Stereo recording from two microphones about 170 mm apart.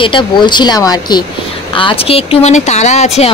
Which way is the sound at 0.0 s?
30° left (ahead or behind).